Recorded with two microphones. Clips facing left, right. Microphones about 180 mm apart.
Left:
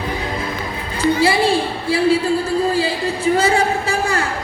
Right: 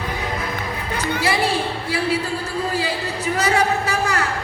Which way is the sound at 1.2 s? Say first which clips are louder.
Left 3 dB; 30° left (ahead or behind).